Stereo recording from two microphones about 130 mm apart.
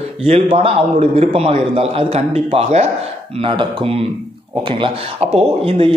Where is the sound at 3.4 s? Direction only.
45° right (ahead or behind).